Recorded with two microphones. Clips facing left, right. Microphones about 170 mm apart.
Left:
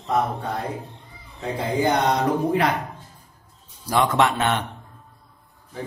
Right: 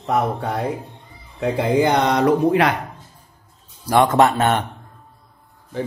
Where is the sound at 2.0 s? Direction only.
80° right.